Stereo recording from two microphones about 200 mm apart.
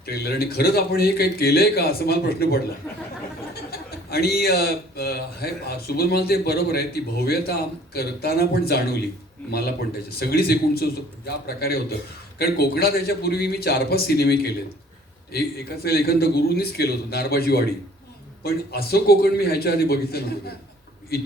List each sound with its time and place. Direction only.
0.0 s a man's voice: 50° left (ahead or behind)
2.8 s a sound: 15° left (ahead or behind)
3.5 s a man's voice: 50° left (ahead or behind)